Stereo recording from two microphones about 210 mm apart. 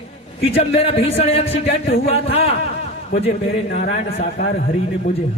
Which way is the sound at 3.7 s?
35° left (ahead or behind).